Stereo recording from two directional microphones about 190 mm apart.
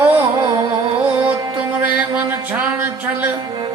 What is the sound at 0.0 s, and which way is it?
Carnatic music, 10° right (ahead or behind).